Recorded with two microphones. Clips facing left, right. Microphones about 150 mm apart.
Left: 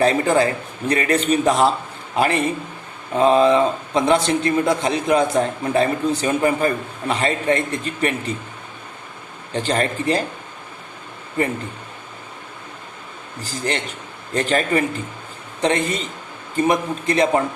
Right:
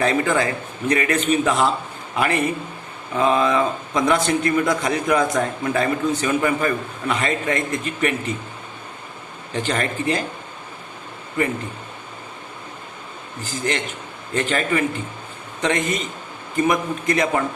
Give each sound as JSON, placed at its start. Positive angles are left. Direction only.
{"t": 0.0, "sound": "speech", "side_deg": 35}
{"t": 9.5, "sound": "speech", "side_deg": 35}
{"t": 11.4, "sound": "speech", "side_deg": 35}
{"t": 13.4, "sound": "speech", "side_deg": 35}